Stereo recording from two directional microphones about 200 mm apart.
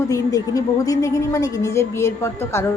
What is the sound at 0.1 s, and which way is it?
A woman's voice, 15° left (ahead or behind).